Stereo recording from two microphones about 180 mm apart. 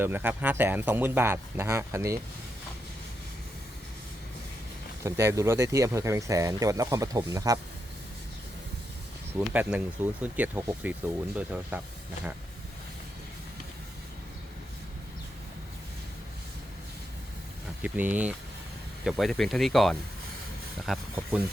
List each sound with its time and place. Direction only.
0.0 s speech: 10° right (ahead or behind)
5.0 s speech: 15° right (ahead or behind)
9.4 s speech: 5° right (ahead or behind)
17.8 s speech: 10° right (ahead or behind)